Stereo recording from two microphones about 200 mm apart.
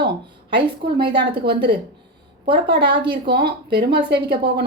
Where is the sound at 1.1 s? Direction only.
55° right (ahead or behind).